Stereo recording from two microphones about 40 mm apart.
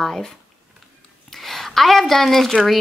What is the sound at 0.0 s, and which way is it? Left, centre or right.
Speech, centre.